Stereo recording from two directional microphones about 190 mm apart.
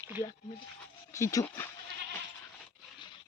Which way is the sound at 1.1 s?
15° left (ahead or behind).